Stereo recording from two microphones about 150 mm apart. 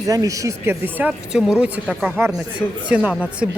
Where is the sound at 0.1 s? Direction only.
20° right (ahead or behind).